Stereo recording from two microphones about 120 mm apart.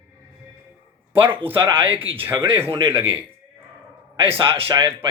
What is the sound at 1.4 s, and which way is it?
Speech, 15° right (ahead or behind).